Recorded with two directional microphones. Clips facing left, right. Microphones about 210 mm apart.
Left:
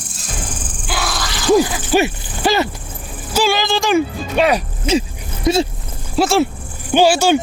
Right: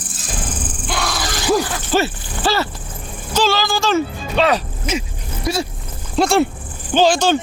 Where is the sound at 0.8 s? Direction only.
Centre (ahead or behind).